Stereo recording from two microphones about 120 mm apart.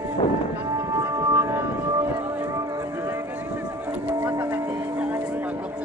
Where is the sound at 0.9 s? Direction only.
25° right (ahead or behind).